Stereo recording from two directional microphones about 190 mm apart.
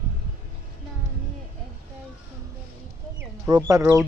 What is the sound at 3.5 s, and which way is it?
Speech, 20° right (ahead or behind).